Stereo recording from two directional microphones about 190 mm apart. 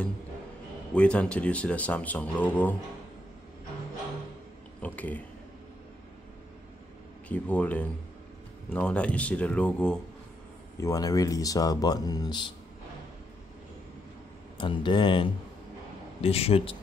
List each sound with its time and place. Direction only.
0.9 s speech: 5° left (ahead or behind)
4.8 s speech: 10° left (ahead or behind)
7.2 s speech: 5° left (ahead or behind)
10.8 s speech: 20° left (ahead or behind)
14.6 s a man's voice: 25° left (ahead or behind)